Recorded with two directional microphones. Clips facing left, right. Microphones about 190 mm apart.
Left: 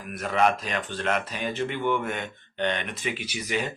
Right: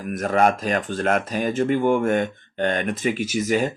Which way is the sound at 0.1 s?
45° right (ahead or behind).